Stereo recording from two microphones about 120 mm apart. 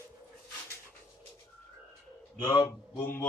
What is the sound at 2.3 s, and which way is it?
Speech, 35° left (ahead or behind).